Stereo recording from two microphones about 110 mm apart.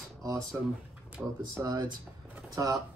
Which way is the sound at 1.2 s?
10° right (ahead or behind).